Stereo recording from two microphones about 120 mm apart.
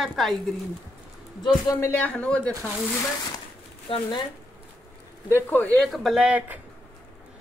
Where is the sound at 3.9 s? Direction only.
45° left (ahead or behind).